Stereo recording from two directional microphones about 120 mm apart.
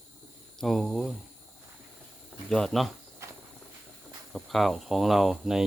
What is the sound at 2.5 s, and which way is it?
Speech, 5° left (ahead or behind).